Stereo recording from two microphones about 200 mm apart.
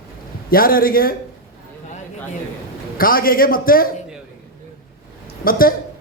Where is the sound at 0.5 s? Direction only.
45° left (ahead or behind).